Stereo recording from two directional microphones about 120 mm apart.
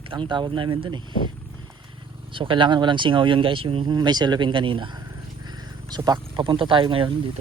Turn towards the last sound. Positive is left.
turn(degrees=-45)  # may be behind; listen again after turning